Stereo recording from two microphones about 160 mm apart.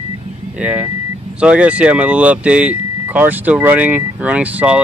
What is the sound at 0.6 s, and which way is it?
Speech, 10° right (ahead or behind).